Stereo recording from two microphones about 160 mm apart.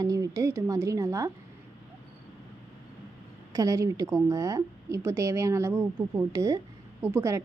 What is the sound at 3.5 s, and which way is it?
A woman's voice, 20° right (ahead or behind).